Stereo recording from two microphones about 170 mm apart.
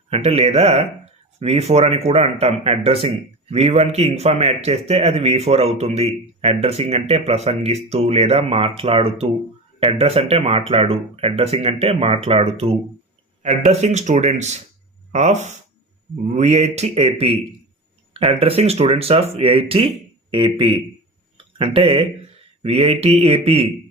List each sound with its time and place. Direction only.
0.1 s a man's voice: 35° right (ahead or behind)
21.3 s a sound: 35° right (ahead or behind)
22.6 s speech: 35° right (ahead or behind)